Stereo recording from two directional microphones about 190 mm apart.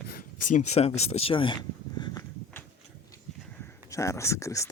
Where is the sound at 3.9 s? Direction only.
15° left (ahead or behind).